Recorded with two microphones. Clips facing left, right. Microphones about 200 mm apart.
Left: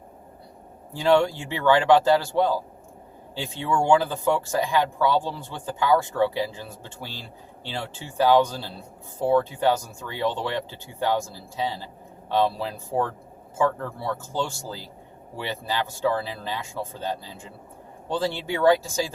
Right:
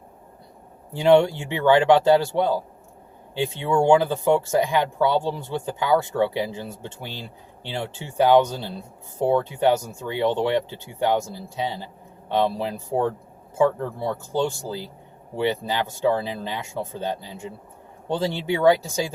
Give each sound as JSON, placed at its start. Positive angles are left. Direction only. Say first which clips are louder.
{"t": 0.9, "sound": "speech", "louder": "right 4 dB", "side_deg": -20}